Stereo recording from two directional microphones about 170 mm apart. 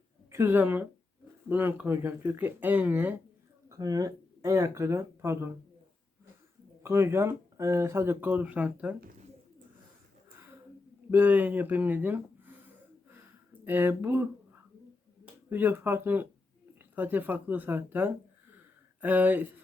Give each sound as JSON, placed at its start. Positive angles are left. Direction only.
{"t": 0.3, "sound": "speech", "side_deg": -15}
{"t": 3.7, "sound": "speech", "side_deg": -20}
{"t": 6.8, "sound": "speech", "side_deg": -15}
{"t": 10.3, "sound": "a sound", "side_deg": -15}
{"t": 11.1, "sound": "speech", "side_deg": -10}